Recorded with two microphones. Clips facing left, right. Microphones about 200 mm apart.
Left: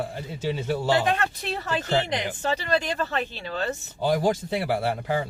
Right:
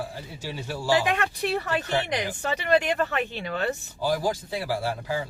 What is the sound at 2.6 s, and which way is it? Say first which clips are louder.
Speech: right 3 dB; 20° right (ahead or behind).